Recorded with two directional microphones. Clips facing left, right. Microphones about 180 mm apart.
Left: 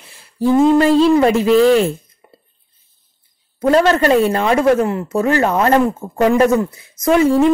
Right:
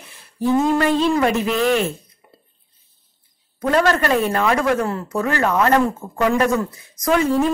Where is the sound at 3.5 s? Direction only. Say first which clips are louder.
Left 5 dB; 30° left (ahead or behind).